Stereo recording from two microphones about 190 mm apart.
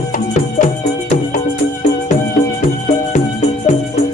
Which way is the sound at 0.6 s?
45° left (ahead or behind).